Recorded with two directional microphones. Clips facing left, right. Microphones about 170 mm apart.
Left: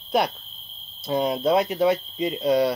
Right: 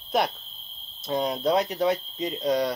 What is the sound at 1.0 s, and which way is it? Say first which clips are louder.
Speech: left 3 dB; 5° left (ahead or behind).